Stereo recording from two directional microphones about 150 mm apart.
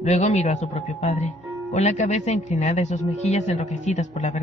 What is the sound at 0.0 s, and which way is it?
Speech, 50° left (ahead or behind).